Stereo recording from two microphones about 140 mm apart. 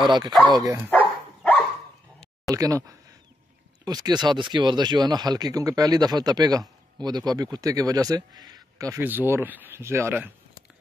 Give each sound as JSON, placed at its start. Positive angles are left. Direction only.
{"t": 0.0, "sound": "speech", "side_deg": -30}
{"t": 0.8, "sound": "dog", "side_deg": 10}
{"t": 2.5, "sound": "speech", "side_deg": -25}